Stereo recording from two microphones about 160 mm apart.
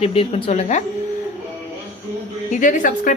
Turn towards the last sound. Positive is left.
turn(degrees=55)  # may be behind; listen again after turning